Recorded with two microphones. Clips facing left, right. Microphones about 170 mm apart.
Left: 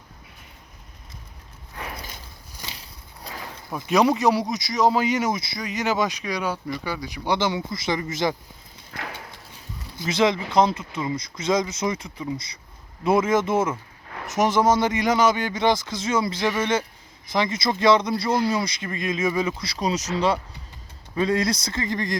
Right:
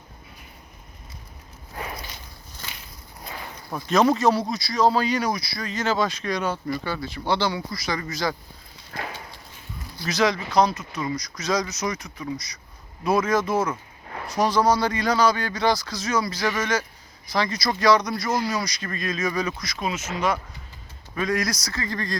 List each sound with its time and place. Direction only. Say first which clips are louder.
2.6 s walk: left 1 dB; 15° left (ahead or behind)
3.8 s speech: even; 10° left (ahead or behind)
10.0 s speech: left 2 dB; 25° left (ahead or behind)